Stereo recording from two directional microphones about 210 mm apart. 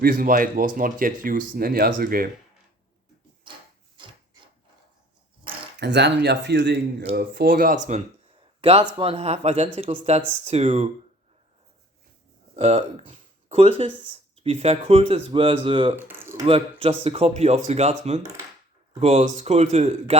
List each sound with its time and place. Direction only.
0.0 s speech: 40° right (ahead or behind)
4.0 s wood: 20° right (ahead or behind)
5.8 s speech: 55° right (ahead or behind); by 10.8 s 30° right (ahead or behind)
12.5 s speech: 30° right (ahead or behind)
16.0 s a sound: 10° right (ahead or behind)
16.5 s speech: 25° right (ahead or behind)